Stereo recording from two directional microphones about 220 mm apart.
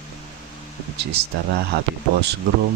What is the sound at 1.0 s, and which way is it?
Speech, 45° right (ahead or behind).